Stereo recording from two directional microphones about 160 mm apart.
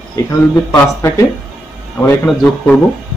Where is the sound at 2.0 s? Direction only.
15° left (ahead or behind).